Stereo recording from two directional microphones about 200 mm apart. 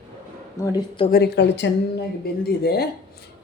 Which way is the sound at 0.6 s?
20° left (ahead or behind).